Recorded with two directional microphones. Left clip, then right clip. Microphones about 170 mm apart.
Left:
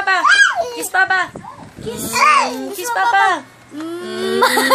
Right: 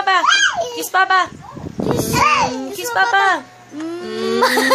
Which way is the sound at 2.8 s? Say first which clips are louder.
Left 1 dB; 15° right (ahead or behind).